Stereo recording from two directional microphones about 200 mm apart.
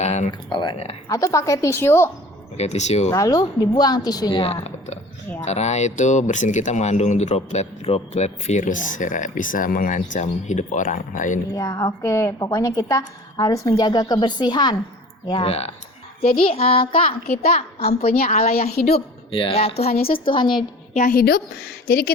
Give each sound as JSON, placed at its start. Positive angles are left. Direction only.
{"t": 0.0, "sound": "a sound", "side_deg": 35}
{"t": 0.3, "sound": "a woman's voice", "side_deg": 20}
{"t": 2.6, "sound": "speech", "side_deg": 35}
{"t": 3.1, "sound": "a woman's voice", "side_deg": 15}
{"t": 11.5, "sound": "a woman's voice", "side_deg": 15}
{"t": 18.0, "sound": "a woman's voice", "side_deg": 50}
{"t": 18.3, "sound": "a woman's voice", "side_deg": 30}
{"t": 21.0, "sound": "a woman's voice", "side_deg": 45}